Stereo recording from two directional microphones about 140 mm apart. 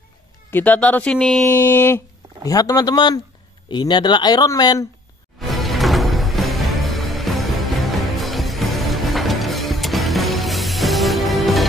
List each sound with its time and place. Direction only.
0.5 s speech: 10° left (ahead or behind)
1.5 s speech: 15° left (ahead or behind)
2.4 s speech: 25° left (ahead or behind)
5.5 s music: centre (ahead or behind)